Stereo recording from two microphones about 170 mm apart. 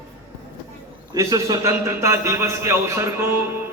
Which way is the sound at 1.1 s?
20° right (ahead or behind).